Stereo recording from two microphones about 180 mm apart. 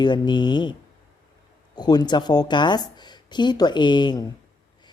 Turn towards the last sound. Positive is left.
turn(degrees=20)  # may be behind; listen again after turning